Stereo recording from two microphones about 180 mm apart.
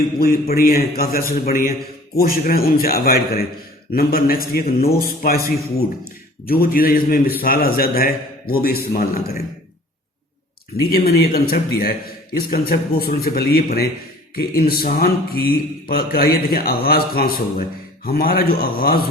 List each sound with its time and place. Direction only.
0.4 s speech: 55° left (ahead or behind)
6.4 s speech: 55° left (ahead or behind)
10.8 s speech: 60° left (ahead or behind)